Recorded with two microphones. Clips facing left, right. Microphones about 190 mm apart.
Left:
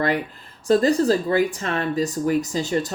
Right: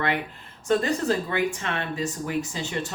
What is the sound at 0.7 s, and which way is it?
Speech, 35° left (ahead or behind).